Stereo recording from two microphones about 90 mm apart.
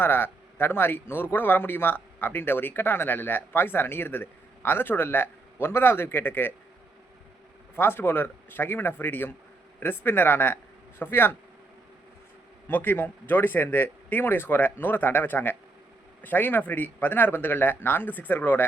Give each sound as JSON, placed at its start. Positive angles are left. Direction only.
{"t": 0.0, "sound": "speech", "side_deg": 25}
{"t": 7.8, "sound": "speech", "side_deg": 25}
{"t": 12.6, "sound": "speech", "side_deg": 20}